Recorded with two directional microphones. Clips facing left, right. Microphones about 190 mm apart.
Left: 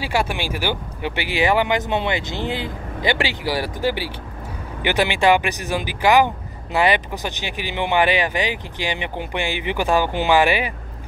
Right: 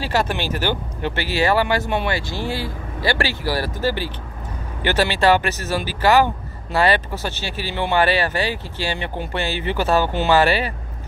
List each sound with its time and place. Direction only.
0.0 s speech: 10° left (ahead or behind)